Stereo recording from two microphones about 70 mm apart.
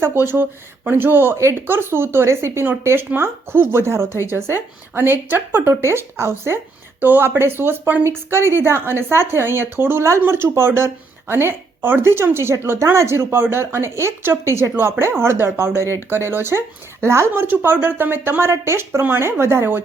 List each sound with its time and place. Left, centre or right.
0.0 s speech: right